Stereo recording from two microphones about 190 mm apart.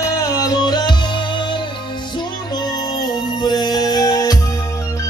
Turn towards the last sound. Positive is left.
turn(degrees=20)  # may be behind; listen again after turning